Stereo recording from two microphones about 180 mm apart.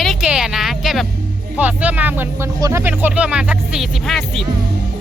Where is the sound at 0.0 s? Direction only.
Centre (ahead or behind).